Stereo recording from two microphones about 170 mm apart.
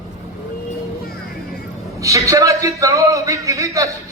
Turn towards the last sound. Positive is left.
turn(degrees=-20)  # may be behind; listen again after turning